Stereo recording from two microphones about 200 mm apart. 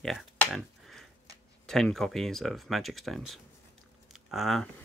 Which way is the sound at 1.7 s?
Centre (ahead or behind).